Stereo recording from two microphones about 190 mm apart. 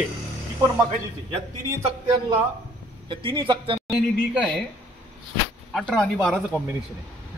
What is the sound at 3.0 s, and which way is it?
Speech, 25° right (ahead or behind).